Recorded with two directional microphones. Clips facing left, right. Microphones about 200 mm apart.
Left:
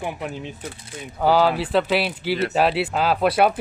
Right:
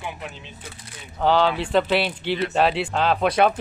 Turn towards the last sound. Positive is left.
turn(degrees=5)  # may be behind; listen again after turning